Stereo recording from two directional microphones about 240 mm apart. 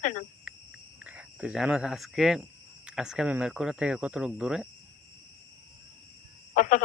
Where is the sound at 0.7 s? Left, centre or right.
Centre.